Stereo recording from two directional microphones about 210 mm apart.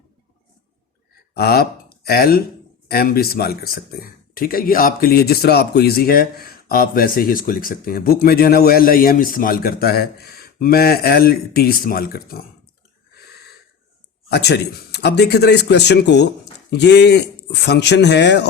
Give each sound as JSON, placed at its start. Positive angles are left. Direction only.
{"t": 1.3, "sound": "speech", "side_deg": 45}
{"t": 14.3, "sound": "speech", "side_deg": 50}